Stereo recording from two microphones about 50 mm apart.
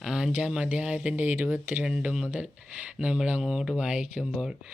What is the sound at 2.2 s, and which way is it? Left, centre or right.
Speech, right.